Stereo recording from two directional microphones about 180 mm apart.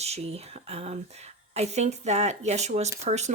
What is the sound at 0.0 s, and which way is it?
Speech, 35° right (ahead or behind).